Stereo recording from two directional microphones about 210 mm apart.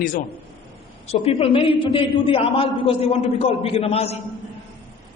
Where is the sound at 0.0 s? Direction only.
40° left (ahead or behind).